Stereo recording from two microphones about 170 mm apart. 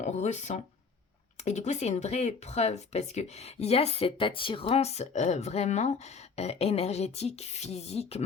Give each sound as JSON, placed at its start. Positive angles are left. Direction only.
{"t": 0.0, "sound": "speech", "side_deg": 45}